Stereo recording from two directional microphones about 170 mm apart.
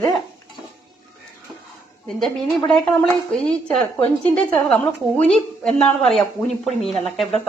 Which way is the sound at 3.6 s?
5° left (ahead or behind).